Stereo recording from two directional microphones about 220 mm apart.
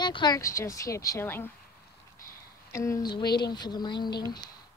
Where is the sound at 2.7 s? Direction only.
15° left (ahead or behind).